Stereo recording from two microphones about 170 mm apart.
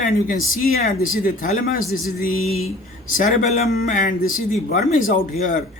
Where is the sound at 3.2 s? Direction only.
40° left (ahead or behind).